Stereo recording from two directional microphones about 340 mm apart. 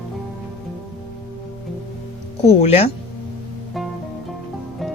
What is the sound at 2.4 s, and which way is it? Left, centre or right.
Speech, centre.